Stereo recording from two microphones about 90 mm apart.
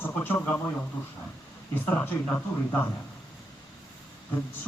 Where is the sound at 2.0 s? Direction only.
25° left (ahead or behind).